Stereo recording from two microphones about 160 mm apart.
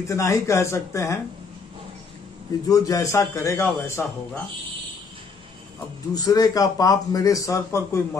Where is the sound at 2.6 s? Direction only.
20° left (ahead or behind).